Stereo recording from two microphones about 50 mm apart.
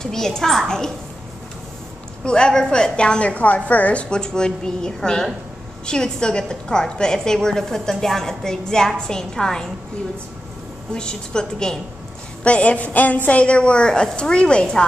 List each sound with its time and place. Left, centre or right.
0.0 s a woman's voice: centre
2.2 s a woman's voice: centre
10.9 s a woman's voice: centre
12.4 s a woman's voice: left